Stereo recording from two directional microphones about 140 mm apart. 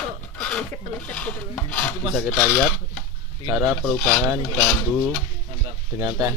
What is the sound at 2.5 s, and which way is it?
Speech, 15° left (ahead or behind).